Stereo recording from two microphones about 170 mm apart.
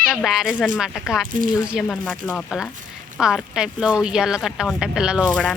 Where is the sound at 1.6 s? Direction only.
5° right (ahead or behind).